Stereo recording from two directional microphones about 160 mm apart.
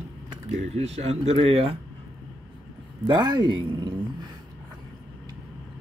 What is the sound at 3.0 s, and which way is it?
Speech, 25° right (ahead or behind).